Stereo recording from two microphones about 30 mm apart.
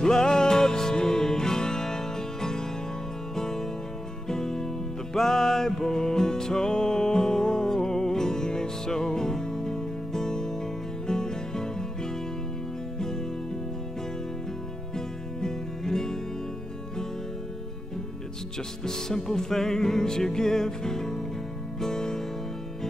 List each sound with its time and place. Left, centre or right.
0.0 s music: left
15.0 s music: centre
18.9 s music: centre